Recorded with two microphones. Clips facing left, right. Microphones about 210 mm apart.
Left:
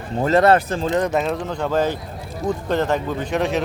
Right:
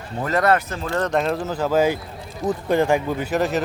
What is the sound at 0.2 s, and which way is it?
Speech, 25° left (ahead or behind).